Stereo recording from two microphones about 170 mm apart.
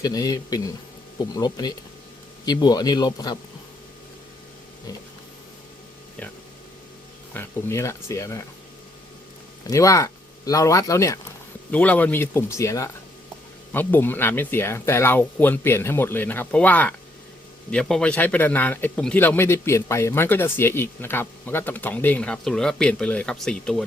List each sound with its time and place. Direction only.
0.0 s speech: 20° left (ahead or behind)
7.3 s speech: 15° left (ahead or behind)
9.6 s speech: 20° left (ahead or behind)